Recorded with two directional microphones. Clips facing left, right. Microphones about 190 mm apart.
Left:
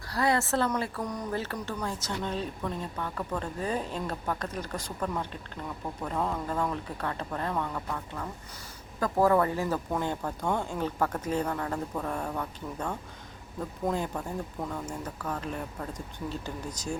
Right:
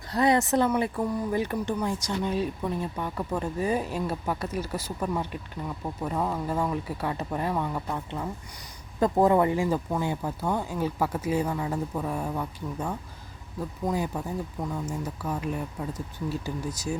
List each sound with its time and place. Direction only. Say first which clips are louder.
0.1 s speech: right 4 dB; 20° right (ahead or behind)
1.0 s speech: right 5 dB; 5° right (ahead or behind)
1.4 s speech: right 6 dB; 15° right (ahead or behind)